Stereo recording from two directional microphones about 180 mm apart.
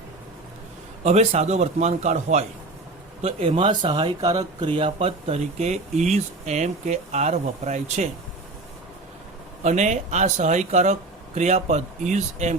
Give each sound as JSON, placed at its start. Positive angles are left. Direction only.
{"t": 1.0, "sound": "speech", "side_deg": -35}
{"t": 9.6, "sound": "speech", "side_deg": -40}